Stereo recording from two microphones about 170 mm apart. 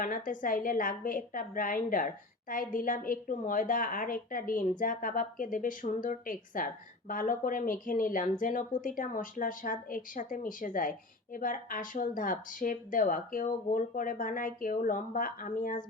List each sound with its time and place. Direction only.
0.0 s speech: 50° left (ahead or behind)